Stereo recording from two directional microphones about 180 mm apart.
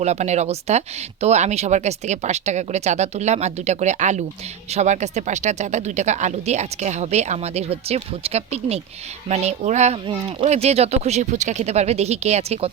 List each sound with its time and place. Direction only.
0.0 s speech: 40° right (ahead or behind)